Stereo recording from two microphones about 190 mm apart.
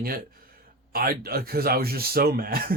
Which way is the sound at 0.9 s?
50° right (ahead or behind).